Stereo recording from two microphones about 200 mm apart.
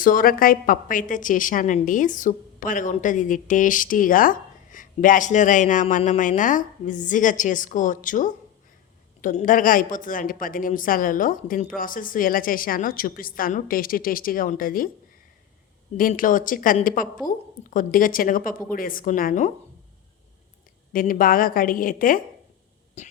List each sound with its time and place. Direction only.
0.0 s a woman's voice: 45° left (ahead or behind)
16.0 s speech: 45° left (ahead or behind)
20.9 s speech: 45° left (ahead or behind)
23.0 s beatboxing: 35° left (ahead or behind)